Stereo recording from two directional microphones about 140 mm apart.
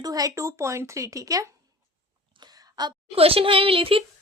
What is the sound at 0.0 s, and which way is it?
Speech, 25° right (ahead or behind).